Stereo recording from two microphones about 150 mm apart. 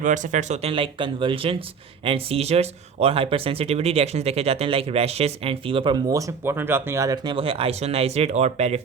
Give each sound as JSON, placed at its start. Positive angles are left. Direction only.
{"t": 0.0, "sound": "speech", "side_deg": -55}
{"t": 0.7, "sound": "speech", "side_deg": -35}
{"t": 7.3, "sound": "speech", "side_deg": -35}